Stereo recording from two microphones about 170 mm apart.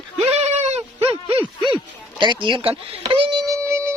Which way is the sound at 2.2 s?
30° right (ahead or behind).